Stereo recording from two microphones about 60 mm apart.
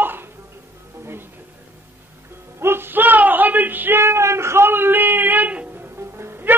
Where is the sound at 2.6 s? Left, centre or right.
Right.